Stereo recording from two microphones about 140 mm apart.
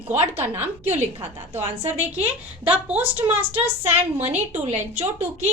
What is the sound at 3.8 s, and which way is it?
A woman's voice, 50° right (ahead or behind).